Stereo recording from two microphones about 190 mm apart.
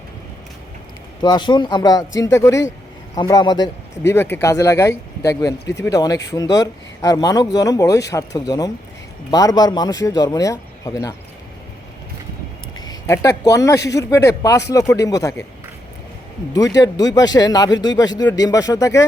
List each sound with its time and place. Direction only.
1.2 s speech: 25° left (ahead or behind)
12.8 s speech: 20° left (ahead or behind)
16.7 s speech: 20° left (ahead or behind)